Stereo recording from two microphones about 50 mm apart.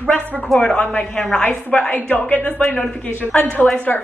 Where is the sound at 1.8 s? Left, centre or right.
Left.